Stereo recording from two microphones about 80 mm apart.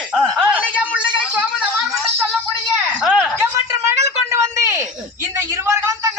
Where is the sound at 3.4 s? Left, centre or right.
Right.